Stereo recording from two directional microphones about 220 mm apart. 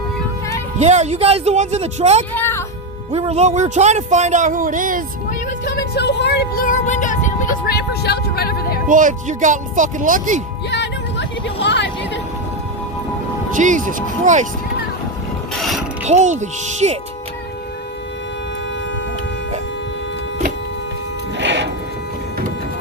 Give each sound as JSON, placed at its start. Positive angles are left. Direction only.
{"t": 0.8, "sound": "speech", "side_deg": -30}
{"t": 2.3, "sound": "a child's voice", "side_deg": 10}
{"t": 3.1, "sound": "speech", "side_deg": -30}
{"t": 5.6, "sound": "speech", "side_deg": 45}
{"t": 8.9, "sound": "speech", "side_deg": -35}
{"t": 10.7, "sound": "vehicle", "side_deg": 55}
{"t": 13.6, "sound": "speech", "side_deg": -35}
{"t": 16.0, "sound": "speech", "side_deg": -30}
{"t": 21.3, "sound": "music", "side_deg": -55}